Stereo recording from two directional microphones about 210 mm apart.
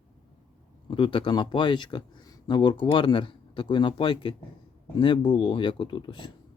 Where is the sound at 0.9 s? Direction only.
25° left (ahead or behind).